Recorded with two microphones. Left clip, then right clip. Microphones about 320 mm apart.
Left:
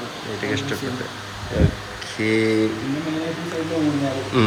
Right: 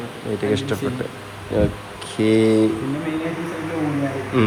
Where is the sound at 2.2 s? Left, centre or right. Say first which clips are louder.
Right 3 dB; centre.